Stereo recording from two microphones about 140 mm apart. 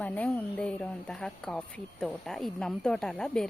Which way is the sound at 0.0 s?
10° left (ahead or behind).